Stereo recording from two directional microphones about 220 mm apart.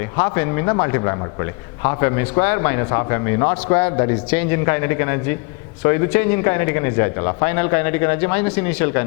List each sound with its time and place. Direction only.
0.2 s a man's voice: 15° left (ahead or behind)